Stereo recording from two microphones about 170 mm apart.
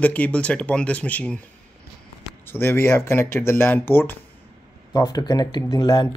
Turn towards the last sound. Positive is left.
turn(degrees=25)  # may be behind; listen again after turning